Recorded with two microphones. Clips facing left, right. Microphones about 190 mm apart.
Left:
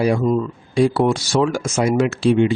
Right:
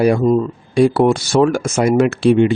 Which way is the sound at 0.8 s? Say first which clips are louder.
Right 4 dB; 60° right (ahead or behind).